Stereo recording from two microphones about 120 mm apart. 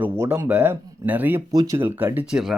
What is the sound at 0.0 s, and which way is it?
Speech, 20° right (ahead or behind).